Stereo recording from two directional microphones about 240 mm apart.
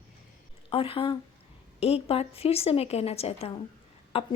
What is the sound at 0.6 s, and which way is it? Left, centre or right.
A woman's voice, left.